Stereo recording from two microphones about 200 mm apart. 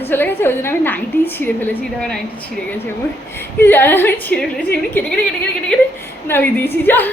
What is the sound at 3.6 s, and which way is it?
A woman's voice, 10° left (ahead or behind).